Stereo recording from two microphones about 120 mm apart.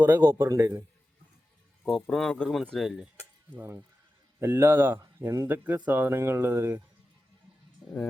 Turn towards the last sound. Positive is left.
turn(degrees=-5)  # may be behind; listen again after turning